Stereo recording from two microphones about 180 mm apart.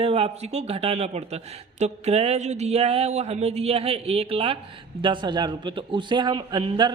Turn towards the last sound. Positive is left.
turn(degrees=-25)  # may be behind; listen again after turning